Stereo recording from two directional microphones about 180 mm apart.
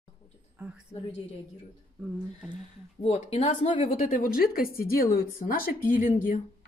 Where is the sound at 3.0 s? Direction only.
35° left (ahead or behind).